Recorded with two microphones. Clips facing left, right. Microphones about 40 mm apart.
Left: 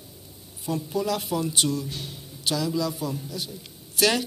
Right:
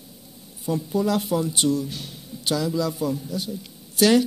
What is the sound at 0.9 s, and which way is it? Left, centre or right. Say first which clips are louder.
Speech: right 4 dB; right.